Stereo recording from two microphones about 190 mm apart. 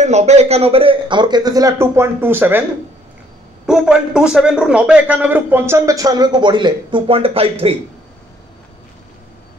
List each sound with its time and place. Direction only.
0.0 s a man's voice: 35° right (ahead or behind); by 2.6 s 10° right (ahead or behind)
3.6 s a man's voice: 5° right (ahead or behind); by 7.7 s 30° right (ahead or behind)